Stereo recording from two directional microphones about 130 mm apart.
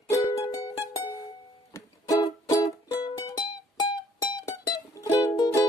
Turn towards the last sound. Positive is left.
turn(degrees=30)  # may be behind; listen again after turning